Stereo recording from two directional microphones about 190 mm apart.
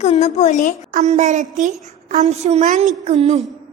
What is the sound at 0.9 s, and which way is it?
A woman's voice, 40° right (ahead or behind).